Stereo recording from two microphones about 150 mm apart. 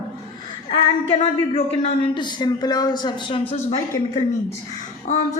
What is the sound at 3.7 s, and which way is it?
Speech, 45° left (ahead or behind).